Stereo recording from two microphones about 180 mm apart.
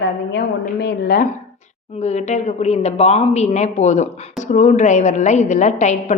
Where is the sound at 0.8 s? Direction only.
55° left (ahead or behind).